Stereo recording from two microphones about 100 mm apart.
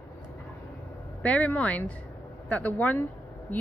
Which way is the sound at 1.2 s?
15° left (ahead or behind).